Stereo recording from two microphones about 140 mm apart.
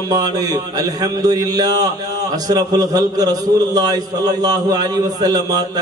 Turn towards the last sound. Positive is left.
turn(degrees=-25)  # may be behind; listen again after turning